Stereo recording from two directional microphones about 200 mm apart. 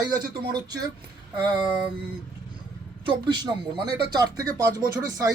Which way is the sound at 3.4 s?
20° right (ahead or behind).